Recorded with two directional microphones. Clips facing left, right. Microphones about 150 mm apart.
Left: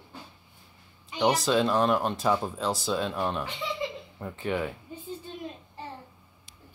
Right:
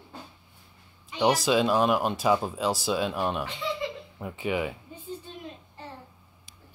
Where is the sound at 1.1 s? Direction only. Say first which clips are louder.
Right 1 dB; 10° right (ahead or behind).